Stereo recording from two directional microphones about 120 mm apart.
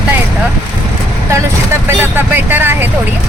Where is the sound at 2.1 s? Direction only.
15° right (ahead or behind).